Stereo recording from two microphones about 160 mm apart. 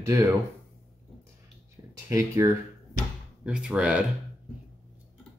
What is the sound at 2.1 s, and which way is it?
Speech, 20° right (ahead or behind).